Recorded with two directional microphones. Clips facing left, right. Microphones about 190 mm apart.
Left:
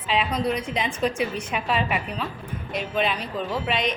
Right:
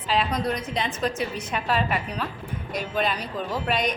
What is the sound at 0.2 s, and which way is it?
A woman's voice, 5° left (ahead or behind).